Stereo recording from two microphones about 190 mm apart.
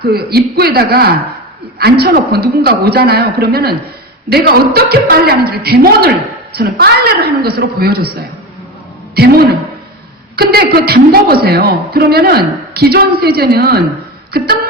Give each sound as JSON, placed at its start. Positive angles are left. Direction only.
{"t": 0.1, "sound": "a woman's voice", "side_deg": -55}
{"t": 9.1, "sound": "a woman's voice", "side_deg": -55}